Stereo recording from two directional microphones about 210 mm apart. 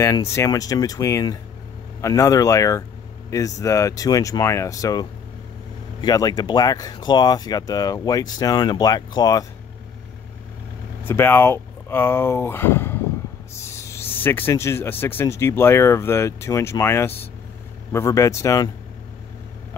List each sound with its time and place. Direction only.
0.0 s speech: 15° left (ahead or behind)
11.1 s speech: 10° left (ahead or behind)